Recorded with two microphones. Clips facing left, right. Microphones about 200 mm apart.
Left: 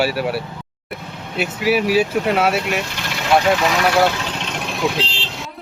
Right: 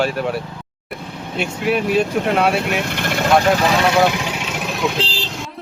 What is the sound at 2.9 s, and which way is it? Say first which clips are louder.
Vehicle: right 6 dB; 55° right (ahead or behind).